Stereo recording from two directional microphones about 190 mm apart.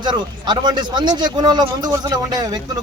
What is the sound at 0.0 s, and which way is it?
Speech, 25° right (ahead or behind).